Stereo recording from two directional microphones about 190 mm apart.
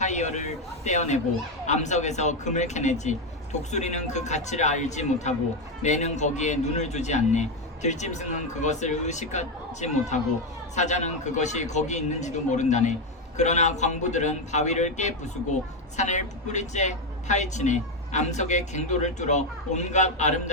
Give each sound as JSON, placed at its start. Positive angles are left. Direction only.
{"t": 0.0, "sound": "a man's voice", "side_deg": 40}